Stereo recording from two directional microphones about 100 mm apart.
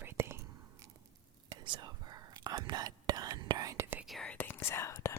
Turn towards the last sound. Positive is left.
turn(degrees=30)  # may be behind; listen again after turning